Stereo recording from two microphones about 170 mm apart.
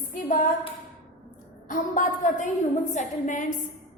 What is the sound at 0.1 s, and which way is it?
Speech, 50° left (ahead or behind).